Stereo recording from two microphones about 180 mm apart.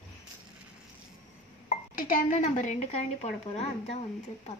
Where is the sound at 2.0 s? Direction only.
45° left (ahead or behind).